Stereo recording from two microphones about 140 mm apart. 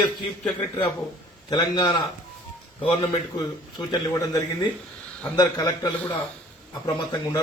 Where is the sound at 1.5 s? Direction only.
30° left (ahead or behind).